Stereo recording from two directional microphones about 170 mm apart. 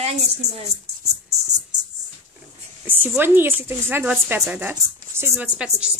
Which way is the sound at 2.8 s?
10° right (ahead or behind).